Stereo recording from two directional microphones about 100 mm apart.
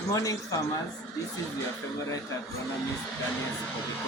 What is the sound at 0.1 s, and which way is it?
Speech, 35° left (ahead or behind).